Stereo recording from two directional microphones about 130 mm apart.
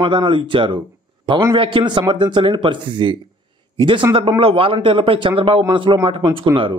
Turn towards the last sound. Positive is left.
turn(degrees=-40)  # may be behind; listen again after turning